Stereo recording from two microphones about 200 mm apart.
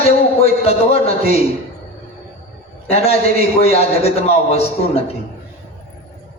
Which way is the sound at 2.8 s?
30° left (ahead or behind).